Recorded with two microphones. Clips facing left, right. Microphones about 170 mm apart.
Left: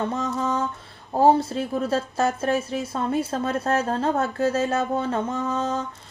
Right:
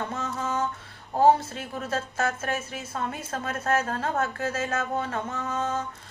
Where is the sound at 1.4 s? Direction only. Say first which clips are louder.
Left 10 dB; 35° left (ahead or behind).